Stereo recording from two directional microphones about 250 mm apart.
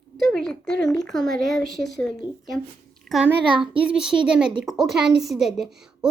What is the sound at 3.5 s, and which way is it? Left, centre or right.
Speech, centre.